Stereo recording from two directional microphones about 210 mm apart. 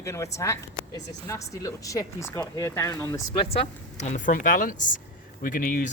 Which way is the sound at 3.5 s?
35° left (ahead or behind).